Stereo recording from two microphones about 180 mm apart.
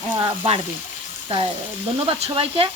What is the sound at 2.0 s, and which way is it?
Speech, 30° right (ahead or behind).